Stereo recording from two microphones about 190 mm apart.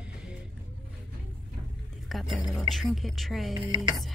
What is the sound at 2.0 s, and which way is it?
A woman's voice, centre (ahead or behind).